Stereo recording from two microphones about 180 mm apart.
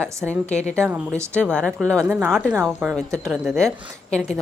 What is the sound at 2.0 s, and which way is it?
A woman's voice, 10° right (ahead or behind).